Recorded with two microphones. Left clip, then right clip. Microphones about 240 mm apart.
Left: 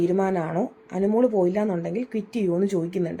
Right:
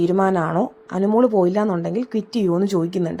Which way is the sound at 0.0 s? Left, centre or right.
Right.